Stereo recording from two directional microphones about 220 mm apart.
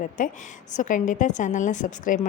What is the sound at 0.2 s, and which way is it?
A woman's voice, 35° left (ahead or behind).